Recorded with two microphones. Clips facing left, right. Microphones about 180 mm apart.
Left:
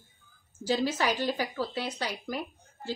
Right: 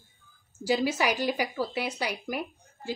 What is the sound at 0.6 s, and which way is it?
Speech, 10° right (ahead or behind).